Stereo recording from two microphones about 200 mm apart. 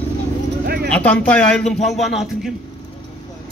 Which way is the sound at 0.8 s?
5° left (ahead or behind).